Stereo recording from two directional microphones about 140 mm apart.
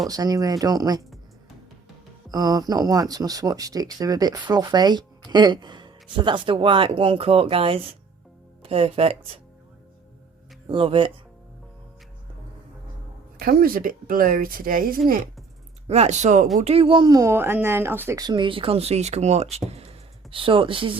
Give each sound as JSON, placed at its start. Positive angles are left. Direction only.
{"t": 0.1, "sound": "speech", "side_deg": -25}
{"t": 2.3, "sound": "speech", "side_deg": -25}
{"t": 10.7, "sound": "speech", "side_deg": -40}
{"t": 13.4, "sound": "speech", "side_deg": -90}
{"t": 15.9, "sound": "speech", "side_deg": -50}
{"t": 16.6, "sound": "speech", "side_deg": -45}
{"t": 18.2, "sound": "speech", "side_deg": -35}